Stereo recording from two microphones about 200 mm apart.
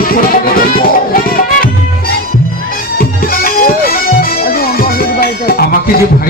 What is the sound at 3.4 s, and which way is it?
Bagpipes, 45° left (ahead or behind).